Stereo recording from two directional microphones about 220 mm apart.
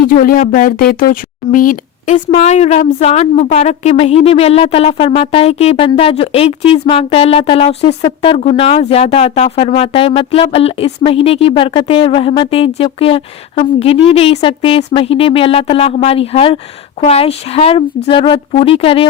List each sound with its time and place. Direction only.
0.1 s speech: 40° left (ahead or behind); by 19.0 s 25° left (ahead or behind)